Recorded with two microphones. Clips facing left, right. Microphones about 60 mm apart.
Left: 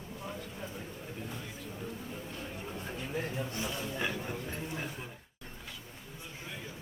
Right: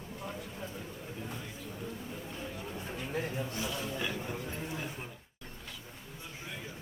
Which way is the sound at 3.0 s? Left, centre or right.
Centre.